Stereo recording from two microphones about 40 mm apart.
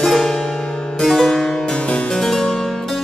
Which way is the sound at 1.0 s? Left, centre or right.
Centre.